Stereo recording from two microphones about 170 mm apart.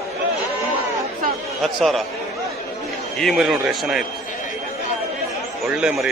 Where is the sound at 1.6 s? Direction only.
Centre (ahead or behind).